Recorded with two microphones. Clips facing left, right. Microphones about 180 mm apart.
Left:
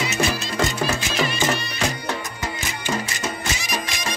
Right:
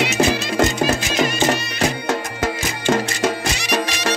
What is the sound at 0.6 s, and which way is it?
Music, 45° right (ahead or behind).